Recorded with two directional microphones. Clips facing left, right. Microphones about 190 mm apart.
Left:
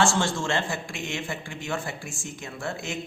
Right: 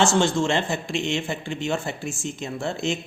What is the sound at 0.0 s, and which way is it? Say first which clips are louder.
A man's voice: right 4 dB; 20° right (ahead or behind).